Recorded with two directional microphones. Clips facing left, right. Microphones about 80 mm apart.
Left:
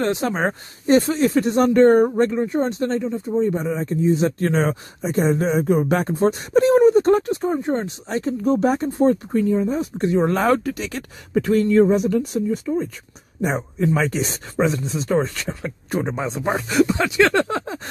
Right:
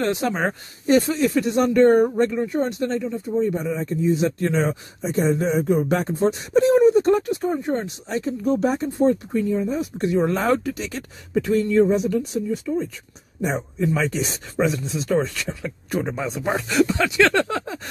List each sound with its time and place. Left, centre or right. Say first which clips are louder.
0.0 s speech: left 1 dB; left
5.9 s speech: left 2 dB; left
6.1 s speech: left 2 dB; left
7.4 s speech: left 2 dB; left
10.3 s speech: left 2 dB; left
11.7 s speech: left 2 dB; left
12.7 s speech: even; left
13.4 s speech: left 2 dB; left